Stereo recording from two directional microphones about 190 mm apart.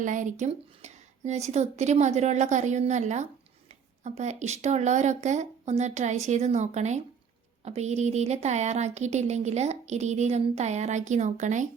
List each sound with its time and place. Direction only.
0.0 s speech: 40° right (ahead or behind)